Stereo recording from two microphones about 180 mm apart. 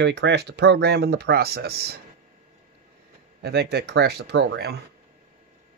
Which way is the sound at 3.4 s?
60° right (ahead or behind).